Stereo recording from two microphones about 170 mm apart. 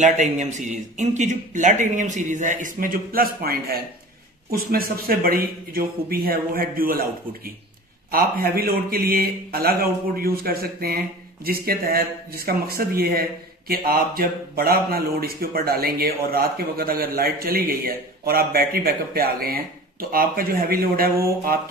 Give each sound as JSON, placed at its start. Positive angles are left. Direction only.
{"t": 0.0, "sound": "a man's voice", "side_deg": -45}